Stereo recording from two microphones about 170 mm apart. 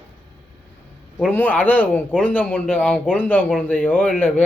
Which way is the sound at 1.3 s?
10° left (ahead or behind).